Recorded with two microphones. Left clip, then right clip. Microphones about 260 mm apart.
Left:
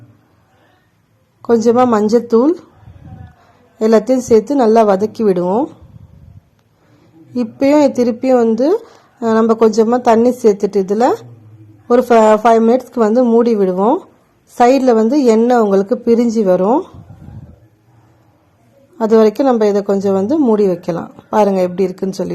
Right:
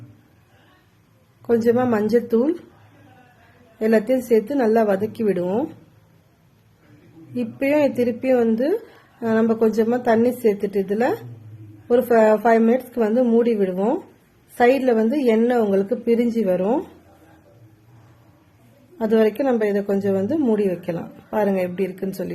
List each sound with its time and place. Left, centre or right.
1.4 s a woman's voice: centre
3.8 s a woman's voice: left
7.3 s a woman's voice: left
18.9 s a woman's voice: left